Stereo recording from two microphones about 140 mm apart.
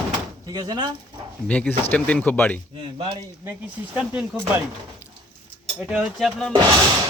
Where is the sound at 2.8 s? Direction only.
40° right (ahead or behind).